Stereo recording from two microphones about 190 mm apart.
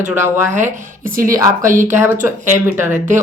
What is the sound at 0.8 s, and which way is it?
Speech, 45° right (ahead or behind).